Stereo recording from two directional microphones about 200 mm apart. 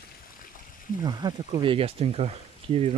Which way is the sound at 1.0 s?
25° right (ahead or behind).